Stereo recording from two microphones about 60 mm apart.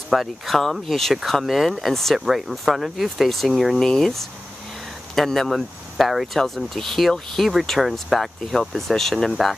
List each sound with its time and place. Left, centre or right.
0.1 s speech: centre
3.8 s speech: centre